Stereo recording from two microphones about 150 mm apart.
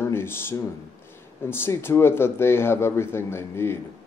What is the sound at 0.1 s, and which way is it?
Speech, 15° left (ahead or behind).